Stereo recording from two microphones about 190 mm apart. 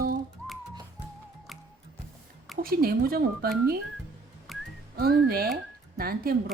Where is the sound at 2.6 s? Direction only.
50° right (ahead or behind).